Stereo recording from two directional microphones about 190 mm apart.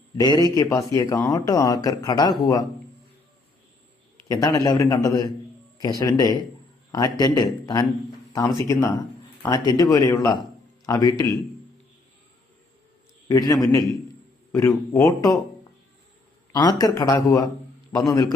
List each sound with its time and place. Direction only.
0.2 s speech: 20° left (ahead or behind)
4.3 s speech: 20° left (ahead or behind)
13.2 s a man's voice: 20° left (ahead or behind)
16.5 s speech: 20° left (ahead or behind)